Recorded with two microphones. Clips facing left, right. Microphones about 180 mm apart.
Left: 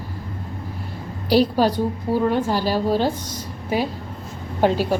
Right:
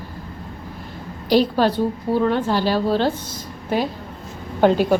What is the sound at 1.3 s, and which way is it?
A woman's voice, 10° left (ahead or behind).